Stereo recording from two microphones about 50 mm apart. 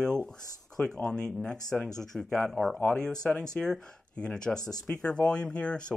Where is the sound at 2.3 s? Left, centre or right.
Left.